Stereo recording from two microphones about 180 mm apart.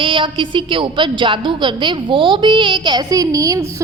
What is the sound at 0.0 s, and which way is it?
A woman's voice, 25° right (ahead or behind).